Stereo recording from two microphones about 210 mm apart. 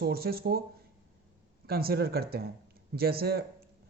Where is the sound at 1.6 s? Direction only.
45° right (ahead or behind).